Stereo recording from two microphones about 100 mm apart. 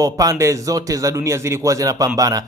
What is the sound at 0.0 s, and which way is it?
A man's voice, 35° right (ahead or behind).